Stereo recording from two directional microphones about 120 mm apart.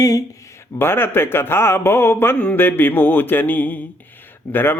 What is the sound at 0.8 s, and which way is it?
Speech, 20° left (ahead or behind).